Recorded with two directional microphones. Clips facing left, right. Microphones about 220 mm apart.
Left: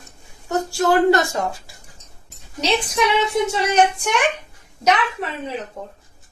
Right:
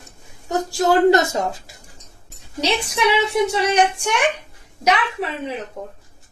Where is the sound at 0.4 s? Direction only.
20° right (ahead or behind).